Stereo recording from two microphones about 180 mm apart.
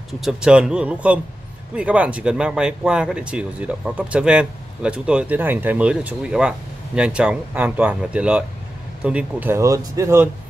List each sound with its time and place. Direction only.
0.2 s speech: 5° right (ahead or behind)